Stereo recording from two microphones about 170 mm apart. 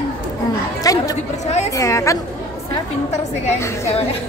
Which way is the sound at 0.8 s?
20° left (ahead or behind).